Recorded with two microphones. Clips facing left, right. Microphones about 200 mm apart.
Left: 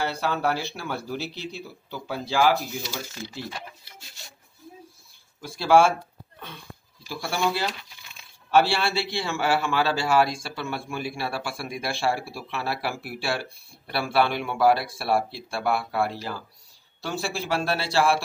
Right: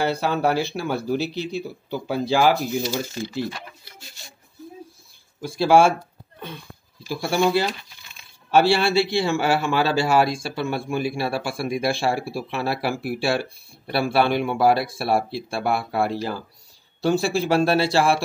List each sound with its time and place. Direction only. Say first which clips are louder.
0.0 s a man's voice: right 4 dB; 15° right (ahead or behind)
5.4 s a man's voice: right 3 dB; 15° right (ahead or behind)
7.1 s a man's voice: right 6 dB; 15° right (ahead or behind)